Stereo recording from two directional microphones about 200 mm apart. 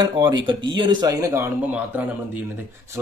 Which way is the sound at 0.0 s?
20° right (ahead or behind).